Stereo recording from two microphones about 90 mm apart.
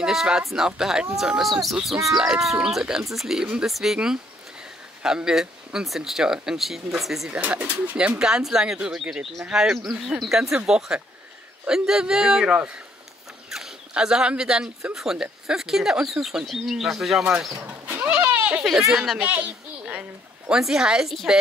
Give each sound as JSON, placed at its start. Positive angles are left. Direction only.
{"t": 0.0, "sound": "speech", "side_deg": -5}
{"t": 11.6, "sound": "a man's voice", "side_deg": -5}
{"t": 17.6, "sound": "a sound", "side_deg": -20}
{"t": 18.6, "sound": "speech", "side_deg": -5}
{"t": 19.1, "sound": "a sound", "side_deg": -15}
{"t": 20.5, "sound": "speech", "side_deg": -5}